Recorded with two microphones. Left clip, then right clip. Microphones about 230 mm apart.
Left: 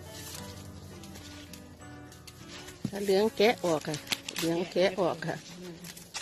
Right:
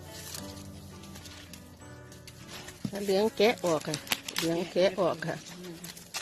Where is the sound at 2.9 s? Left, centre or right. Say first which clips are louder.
Left 1 dB; centre.